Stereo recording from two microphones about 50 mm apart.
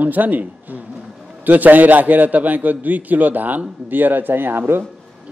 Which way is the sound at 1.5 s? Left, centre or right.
Right.